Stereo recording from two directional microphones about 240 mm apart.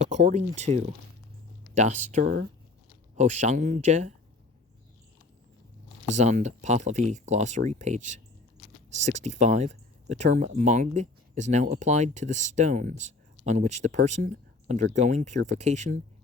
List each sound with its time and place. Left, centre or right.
0.0 s speech: right
6.1 s speech: right